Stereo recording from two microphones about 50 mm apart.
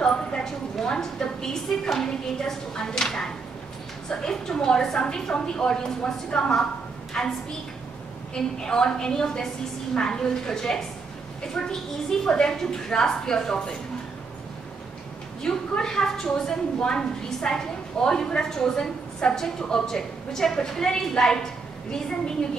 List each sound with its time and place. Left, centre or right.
0.0 s a woman's voice: centre
8.4 s a woman's voice: centre
15.4 s a woman's voice: centre